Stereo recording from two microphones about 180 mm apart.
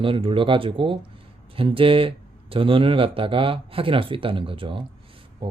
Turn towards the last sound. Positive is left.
turn(degrees=-30)  # may be behind; listen again after turning